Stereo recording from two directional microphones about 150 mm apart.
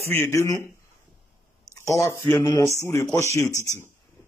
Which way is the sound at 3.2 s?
20° left (ahead or behind).